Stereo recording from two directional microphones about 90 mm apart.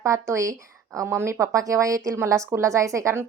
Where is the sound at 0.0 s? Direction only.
30° right (ahead or behind).